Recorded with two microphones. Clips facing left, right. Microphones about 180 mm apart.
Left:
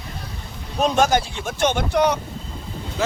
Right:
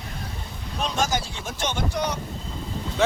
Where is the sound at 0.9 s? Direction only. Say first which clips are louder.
Left 6 dB; 60° left (ahead or behind).